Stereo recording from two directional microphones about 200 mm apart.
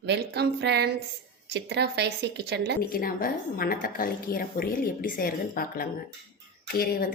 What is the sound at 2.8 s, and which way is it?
A woman's voice, 45° left (ahead or behind).